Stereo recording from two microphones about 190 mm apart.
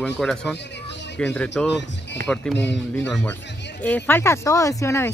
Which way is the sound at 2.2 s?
50° right (ahead or behind).